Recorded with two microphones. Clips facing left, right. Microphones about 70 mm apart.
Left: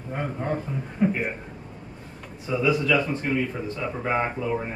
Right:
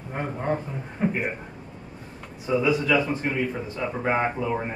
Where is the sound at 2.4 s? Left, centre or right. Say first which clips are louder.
Right 1 dB; centre.